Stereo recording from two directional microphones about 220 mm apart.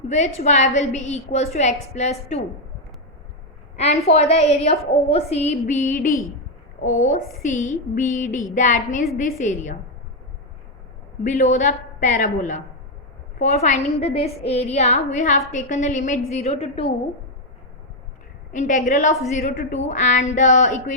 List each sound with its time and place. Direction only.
0.1 s a woman's voice: 30° left (ahead or behind)
3.8 s a woman's voice: 30° left (ahead or behind)
7.4 s a woman's voice: 35° left (ahead or behind)
11.2 s a woman's voice: 35° left (ahead or behind)
18.5 s a woman's voice: 35° left (ahead or behind)